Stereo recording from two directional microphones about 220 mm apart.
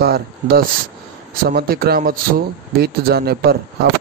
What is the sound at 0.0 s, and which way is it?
Speech, 45° right (ahead or behind).